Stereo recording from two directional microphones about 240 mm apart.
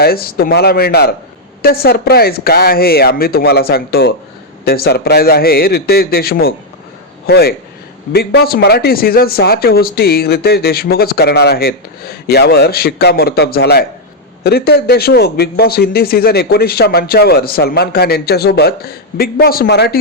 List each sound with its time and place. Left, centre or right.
0.0 s speech: left